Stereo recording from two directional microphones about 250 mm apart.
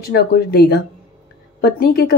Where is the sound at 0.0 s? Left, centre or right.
Left.